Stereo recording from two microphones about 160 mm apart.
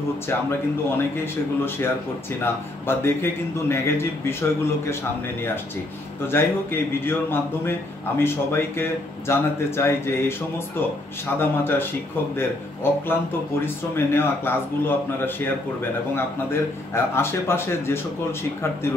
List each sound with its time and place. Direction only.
0.3 s speech: 15° left (ahead or behind)
2.4 s speech: 15° left (ahead or behind)
6.3 s speech: 15° left (ahead or behind)
11.3 s speech: 15° left (ahead or behind)
13.1 s speech: 15° left (ahead or behind)